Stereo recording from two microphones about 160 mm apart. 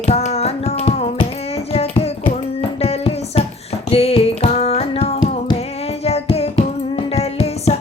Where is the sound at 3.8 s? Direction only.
40° left (ahead or behind).